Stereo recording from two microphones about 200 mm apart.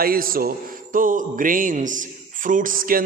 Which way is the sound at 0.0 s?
45° right (ahead or behind).